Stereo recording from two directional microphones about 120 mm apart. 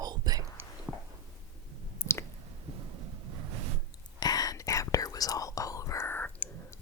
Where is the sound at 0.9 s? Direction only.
5° right (ahead or behind).